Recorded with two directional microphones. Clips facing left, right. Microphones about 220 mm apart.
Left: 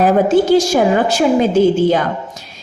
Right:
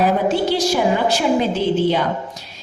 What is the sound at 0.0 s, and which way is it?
A woman's voice, 45° left (ahead or behind).